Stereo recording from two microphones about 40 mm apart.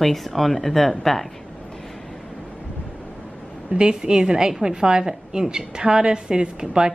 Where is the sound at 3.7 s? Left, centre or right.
Centre.